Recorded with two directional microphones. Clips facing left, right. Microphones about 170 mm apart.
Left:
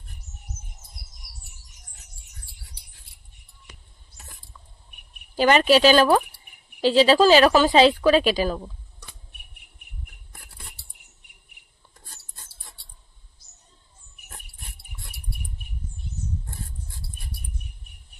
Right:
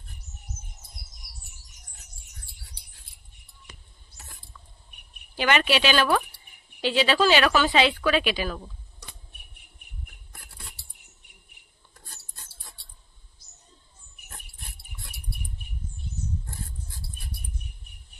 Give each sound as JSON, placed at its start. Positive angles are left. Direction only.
{"t": 5.3, "sound": "a woman's voice", "side_deg": 35}